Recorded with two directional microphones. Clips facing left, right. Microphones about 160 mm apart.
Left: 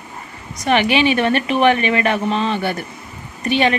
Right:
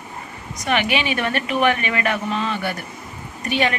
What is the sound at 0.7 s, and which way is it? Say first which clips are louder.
Speech: left 6 dB; 30° left (ahead or behind).